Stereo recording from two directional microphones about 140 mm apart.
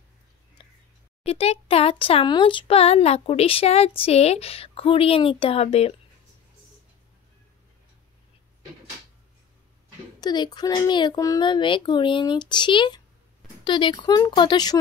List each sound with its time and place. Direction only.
0.6 s whispering: 35° left (ahead or behind)
1.2 s speech: 45° left (ahead or behind)
10.2 s speech: 30° left (ahead or behind)